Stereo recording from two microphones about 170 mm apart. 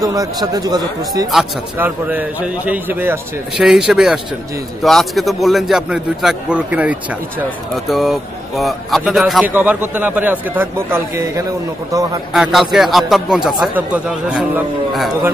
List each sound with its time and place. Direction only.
0.0 s a man's voice: 20° right (ahead or behind)
1.3 s a man's voice: 5° right (ahead or behind)
12.4 s speech: centre (ahead or behind)